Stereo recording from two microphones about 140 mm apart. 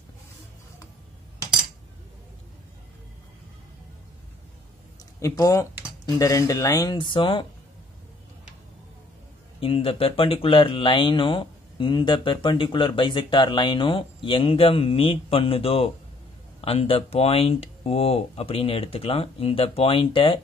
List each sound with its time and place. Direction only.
5.2 s speech: 20° left (ahead or behind)
9.6 s speech: 40° left (ahead or behind)